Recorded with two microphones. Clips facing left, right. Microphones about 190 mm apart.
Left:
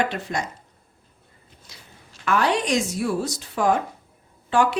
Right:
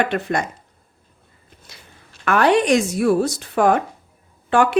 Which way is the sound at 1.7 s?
60° right (ahead or behind).